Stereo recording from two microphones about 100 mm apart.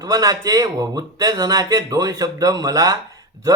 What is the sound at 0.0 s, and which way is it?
Speech, 35° right (ahead or behind).